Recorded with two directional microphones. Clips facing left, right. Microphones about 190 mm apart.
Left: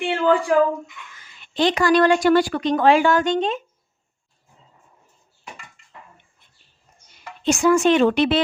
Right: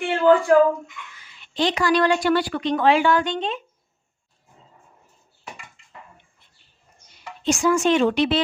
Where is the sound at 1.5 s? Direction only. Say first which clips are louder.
Left 3 dB; 50° left (ahead or behind).